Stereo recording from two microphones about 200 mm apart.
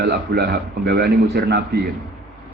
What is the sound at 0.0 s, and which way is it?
A man's voice, 50° right (ahead or behind).